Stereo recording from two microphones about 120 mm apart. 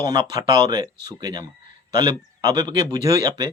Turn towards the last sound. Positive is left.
turn(degrees=-30)  # may be behind; listen again after turning